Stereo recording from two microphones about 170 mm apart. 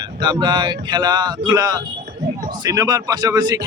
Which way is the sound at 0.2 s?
25° right (ahead or behind).